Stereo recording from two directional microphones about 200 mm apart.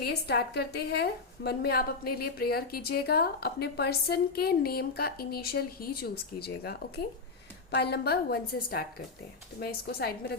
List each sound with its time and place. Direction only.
0.0 s a woman's voice: 55° left (ahead or behind)